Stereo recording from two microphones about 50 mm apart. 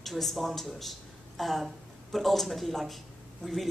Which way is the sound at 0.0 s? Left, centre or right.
Centre.